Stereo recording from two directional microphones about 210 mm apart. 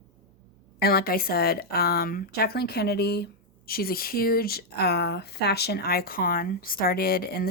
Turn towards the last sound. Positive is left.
turn(degrees=45)  # may be behind; listen again after turning